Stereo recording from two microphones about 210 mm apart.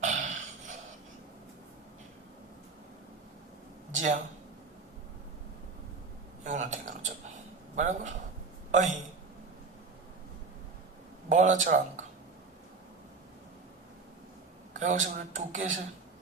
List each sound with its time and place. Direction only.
0.0 s a sound: 35° right (ahead or behind)
3.9 s speech: 35° right (ahead or behind)
6.4 s a man's voice: 35° right (ahead or behind)
11.3 s a man's voice: 35° right (ahead or behind)
14.7 s a man's voice: 35° right (ahead or behind)